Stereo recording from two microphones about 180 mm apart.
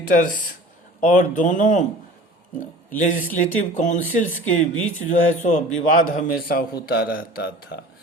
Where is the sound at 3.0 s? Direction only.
50° left (ahead or behind).